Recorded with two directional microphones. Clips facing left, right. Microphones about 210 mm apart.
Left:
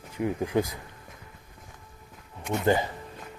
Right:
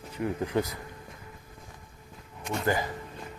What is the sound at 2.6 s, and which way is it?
Speech, 25° left (ahead or behind).